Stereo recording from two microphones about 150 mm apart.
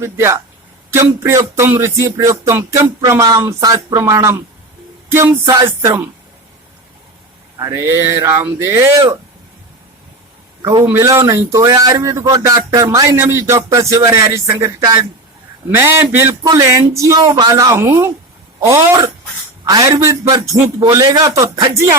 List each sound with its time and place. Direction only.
0.0 s music: 15° right (ahead or behind)
0.9 s speech: 20° right (ahead or behind)
5.0 s music: 15° right (ahead or behind)
7.6 s speech: 20° right (ahead or behind)
10.6 s a man's voice: 25° right (ahead or behind)